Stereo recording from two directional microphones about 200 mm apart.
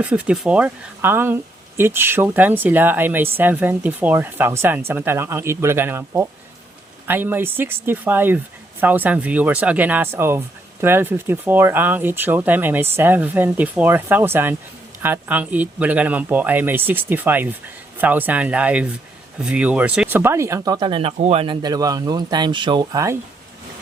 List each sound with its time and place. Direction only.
0.0 s speech: 5° right (ahead or behind)